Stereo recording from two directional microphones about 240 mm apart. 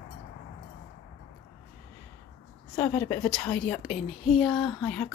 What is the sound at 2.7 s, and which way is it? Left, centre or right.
Speech, centre.